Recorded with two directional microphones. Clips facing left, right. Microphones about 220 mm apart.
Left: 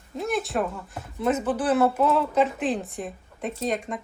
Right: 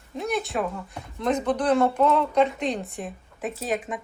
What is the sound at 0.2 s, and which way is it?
Speech, centre (ahead or behind).